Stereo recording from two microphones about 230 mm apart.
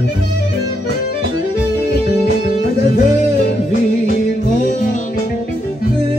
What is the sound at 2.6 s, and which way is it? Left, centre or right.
Music, left.